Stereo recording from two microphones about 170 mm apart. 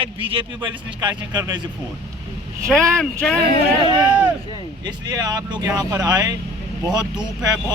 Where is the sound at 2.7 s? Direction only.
Centre (ahead or behind).